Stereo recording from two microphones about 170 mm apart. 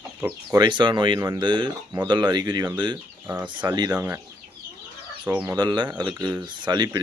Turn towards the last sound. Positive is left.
turn(degrees=-25)  # may be behind; listen again after turning